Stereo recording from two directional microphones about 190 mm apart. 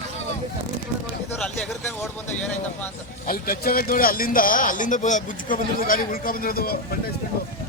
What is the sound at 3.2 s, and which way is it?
Speech, 50° left (ahead or behind).